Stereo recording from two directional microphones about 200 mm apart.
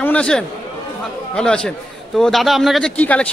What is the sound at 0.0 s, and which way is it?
A man's voice, 5° left (ahead or behind).